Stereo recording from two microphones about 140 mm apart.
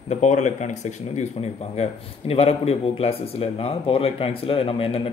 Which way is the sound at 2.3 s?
45° left (ahead or behind).